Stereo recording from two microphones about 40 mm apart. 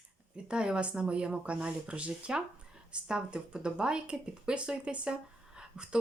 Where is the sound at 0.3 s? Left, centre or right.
Right.